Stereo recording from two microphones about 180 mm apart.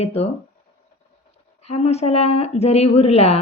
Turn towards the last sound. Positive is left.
turn(degrees=35)  # may be behind; listen again after turning